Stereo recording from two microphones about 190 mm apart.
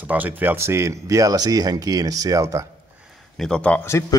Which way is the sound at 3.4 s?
5° left (ahead or behind).